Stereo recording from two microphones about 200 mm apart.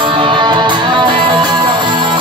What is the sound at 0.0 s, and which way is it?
Music, 25° right (ahead or behind).